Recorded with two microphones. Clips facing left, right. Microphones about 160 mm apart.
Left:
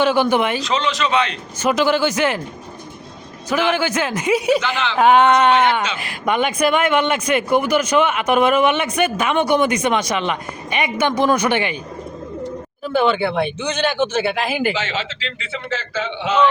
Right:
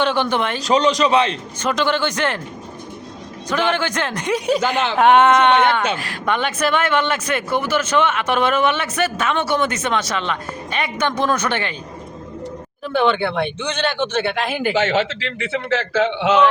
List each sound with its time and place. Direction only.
0.0 s a man's voice: 10° left (ahead or behind)
0.6 s a man's voice: 40° right (ahead or behind)
1.6 s a man's voice: 10° left (ahead or behind)
3.7 s a man's voice: 10° left (ahead or behind)
12.9 s a man's voice: 5° left (ahead or behind)
14.7 s a man's voice: 55° right (ahead or behind); by 16.4 s 75° right (ahead or behind)